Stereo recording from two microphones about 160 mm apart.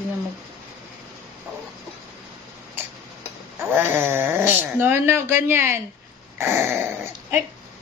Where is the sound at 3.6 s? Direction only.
15° right (ahead or behind).